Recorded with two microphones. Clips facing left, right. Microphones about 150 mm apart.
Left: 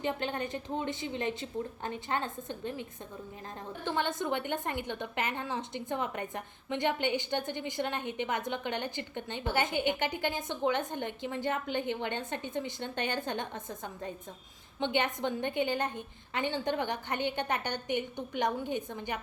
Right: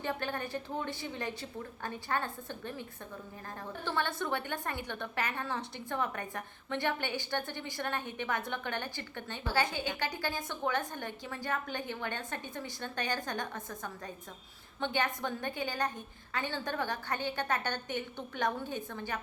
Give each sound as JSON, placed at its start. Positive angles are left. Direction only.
{"t": 0.0, "sound": "a woman's voice", "side_deg": 20}
{"t": 3.8, "sound": "a woman's voice", "side_deg": 15}